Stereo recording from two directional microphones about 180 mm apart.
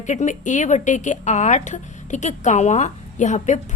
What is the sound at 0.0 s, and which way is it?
Speech, 45° left (ahead or behind).